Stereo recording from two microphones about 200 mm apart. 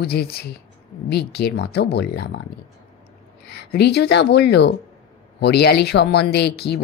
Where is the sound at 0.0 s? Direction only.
50° left (ahead or behind).